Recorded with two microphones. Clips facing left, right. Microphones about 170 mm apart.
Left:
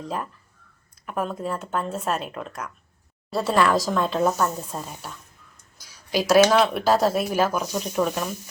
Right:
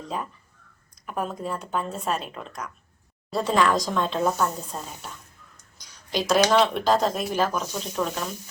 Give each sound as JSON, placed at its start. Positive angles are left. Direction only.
{"t": 0.0, "sound": "a woman's voice", "side_deg": 0}